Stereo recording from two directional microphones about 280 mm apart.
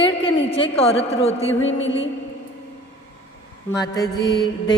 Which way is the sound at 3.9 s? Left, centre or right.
Centre.